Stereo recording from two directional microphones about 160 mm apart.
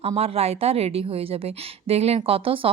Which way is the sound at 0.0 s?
40° right (ahead or behind).